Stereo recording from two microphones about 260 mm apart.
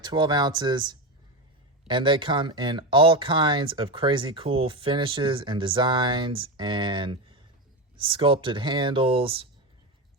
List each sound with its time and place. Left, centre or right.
0.0 s speech: centre